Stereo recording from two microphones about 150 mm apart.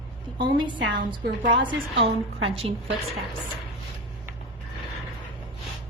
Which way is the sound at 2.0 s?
40° right (ahead or behind).